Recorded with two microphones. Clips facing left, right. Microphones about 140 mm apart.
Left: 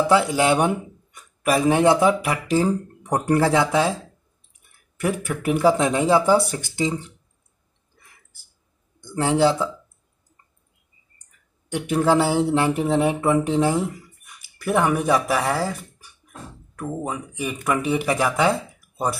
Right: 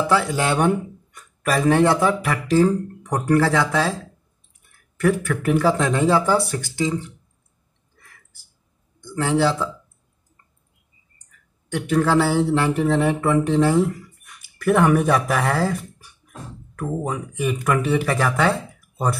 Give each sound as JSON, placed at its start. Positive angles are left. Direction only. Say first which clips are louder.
{"t": 0.1, "sound": "speech", "louder": "left 3 dB", "side_deg": 15}
{"t": 4.9, "sound": "speech", "louder": "right 4 dB", "side_deg": 15}
{"t": 9.1, "sound": "speech", "louder": "left 1 dB", "side_deg": 20}
{"t": 11.7, "sound": "speech", "louder": "even", "side_deg": 15}